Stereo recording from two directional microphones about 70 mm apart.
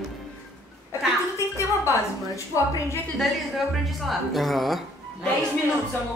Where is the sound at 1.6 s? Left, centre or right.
Left.